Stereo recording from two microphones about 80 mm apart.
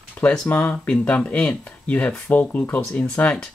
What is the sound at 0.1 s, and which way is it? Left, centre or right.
Speech, centre.